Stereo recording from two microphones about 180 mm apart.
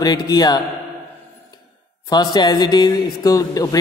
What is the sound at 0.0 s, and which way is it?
Speech, 20° left (ahead or behind).